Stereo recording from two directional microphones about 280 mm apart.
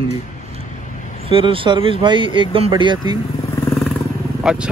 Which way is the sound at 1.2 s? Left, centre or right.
Centre.